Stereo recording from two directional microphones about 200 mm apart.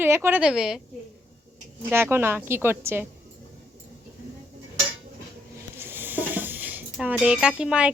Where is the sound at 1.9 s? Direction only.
10° right (ahead or behind).